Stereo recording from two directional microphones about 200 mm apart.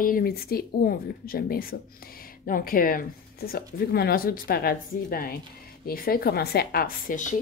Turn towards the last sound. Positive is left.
turn(degrees=40)  # may be behind; listen again after turning